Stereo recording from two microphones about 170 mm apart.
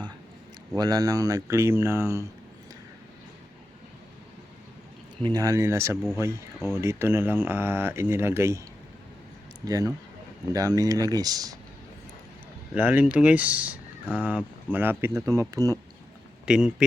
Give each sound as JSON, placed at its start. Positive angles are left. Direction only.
{"t": 0.8, "sound": "speech", "side_deg": -20}
{"t": 5.2, "sound": "speech", "side_deg": -20}
{"t": 9.6, "sound": "speech", "side_deg": -20}
{"t": 12.7, "sound": "speech", "side_deg": -10}
{"t": 16.5, "sound": "speech", "side_deg": -5}